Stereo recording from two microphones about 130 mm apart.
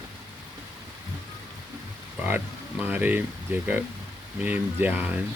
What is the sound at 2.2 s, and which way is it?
Speech, 15° right (ahead or behind).